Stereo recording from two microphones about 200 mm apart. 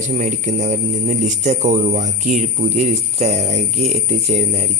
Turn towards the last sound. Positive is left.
turn(degrees=-35)  # may be behind; listen again after turning